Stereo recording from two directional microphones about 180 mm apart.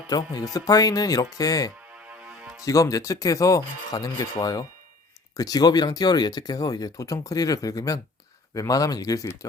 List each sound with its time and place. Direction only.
0.1 s speech: 20° left (ahead or behind)
2.0 s music: 5° right (ahead or behind)
2.6 s speech: 20° left (ahead or behind)